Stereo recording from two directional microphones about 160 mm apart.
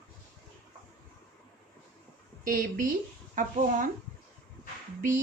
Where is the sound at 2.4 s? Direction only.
65° right (ahead or behind).